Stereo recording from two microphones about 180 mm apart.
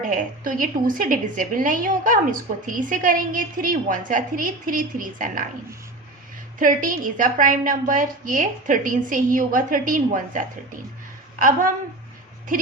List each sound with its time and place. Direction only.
0.0 s a woman's voice: 45° right (ahead or behind)
6.6 s a woman's voice: 45° right (ahead or behind)